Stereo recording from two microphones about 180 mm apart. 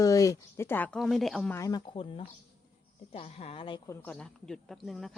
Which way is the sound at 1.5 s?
20° left (ahead or behind).